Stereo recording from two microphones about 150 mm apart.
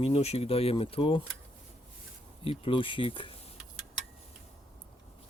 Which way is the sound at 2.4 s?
35° left (ahead or behind).